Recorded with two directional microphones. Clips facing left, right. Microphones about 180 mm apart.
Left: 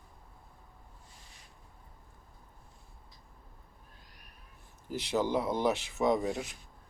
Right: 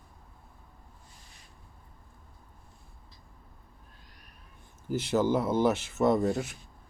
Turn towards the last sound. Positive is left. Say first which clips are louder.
# right 4 dB
turn(degrees=0)  # may be behind; listen again after turning